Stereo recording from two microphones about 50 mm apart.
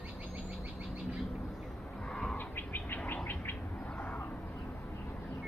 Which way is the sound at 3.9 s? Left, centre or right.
Left.